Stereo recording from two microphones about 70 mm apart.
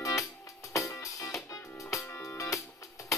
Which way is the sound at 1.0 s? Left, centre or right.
Left.